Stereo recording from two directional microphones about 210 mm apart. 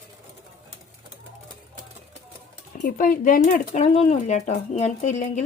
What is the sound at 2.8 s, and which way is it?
Speech, 40° left (ahead or behind).